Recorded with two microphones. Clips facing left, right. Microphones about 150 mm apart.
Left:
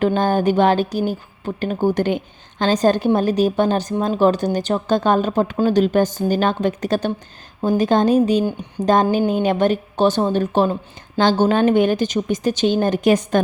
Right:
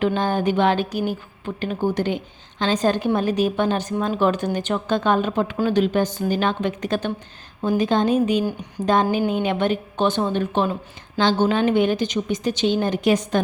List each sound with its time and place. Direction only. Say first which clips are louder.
0.0 s a woman's voice: left 4 dB; 45° left (ahead or behind)